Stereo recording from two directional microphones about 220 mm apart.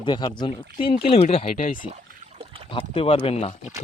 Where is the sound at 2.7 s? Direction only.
25° left (ahead or behind).